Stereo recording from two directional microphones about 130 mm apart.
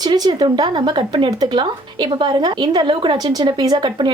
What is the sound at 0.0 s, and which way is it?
Speech, 35° right (ahead or behind).